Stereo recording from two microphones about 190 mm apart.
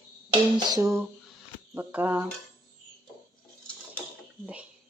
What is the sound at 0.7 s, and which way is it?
A woman's voice, 15° right (ahead or behind).